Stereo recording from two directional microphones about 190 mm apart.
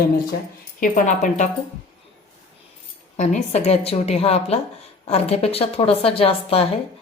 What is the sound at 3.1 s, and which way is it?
Speech, 35° left (ahead or behind).